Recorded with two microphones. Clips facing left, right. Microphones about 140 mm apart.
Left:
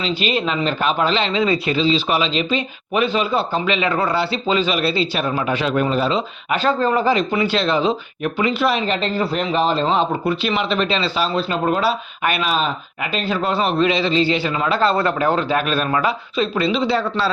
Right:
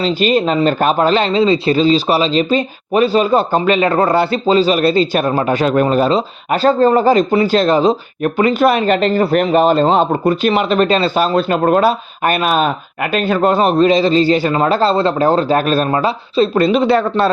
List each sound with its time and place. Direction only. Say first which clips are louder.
0.0 s speech: right 7 dB; 45° right (ahead or behind)
14.8 s a man's voice: right 4 dB; 30° right (ahead or behind)
16.6 s speech: right 6 dB; 50° right (ahead or behind)